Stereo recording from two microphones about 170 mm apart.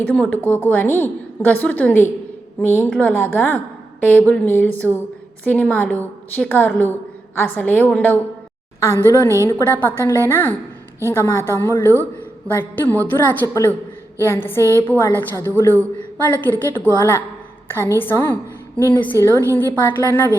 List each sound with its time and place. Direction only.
0.1 s a woman's voice: 5° left (ahead or behind)